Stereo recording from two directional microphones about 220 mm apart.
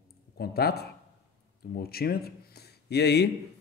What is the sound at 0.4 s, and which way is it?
Speech, 45° left (ahead or behind).